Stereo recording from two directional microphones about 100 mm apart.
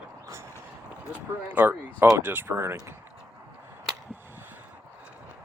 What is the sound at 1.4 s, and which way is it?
Speech, 20° right (ahead or behind).